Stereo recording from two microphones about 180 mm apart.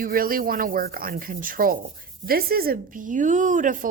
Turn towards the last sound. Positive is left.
turn(degrees=-45)  # may be behind; listen again after turning